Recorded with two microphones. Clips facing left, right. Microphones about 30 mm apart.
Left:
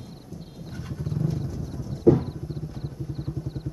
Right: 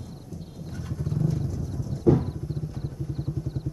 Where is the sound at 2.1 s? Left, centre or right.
Centre.